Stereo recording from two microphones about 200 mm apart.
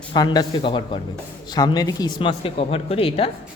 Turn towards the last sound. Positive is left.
turn(degrees=30)  # may be behind; listen again after turning